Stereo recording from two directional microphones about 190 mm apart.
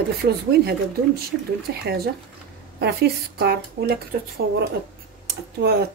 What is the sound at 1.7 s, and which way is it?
Speech, 60° right (ahead or behind).